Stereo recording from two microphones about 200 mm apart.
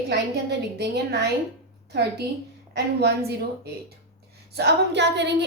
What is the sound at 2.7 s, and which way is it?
Speech, 55° right (ahead or behind).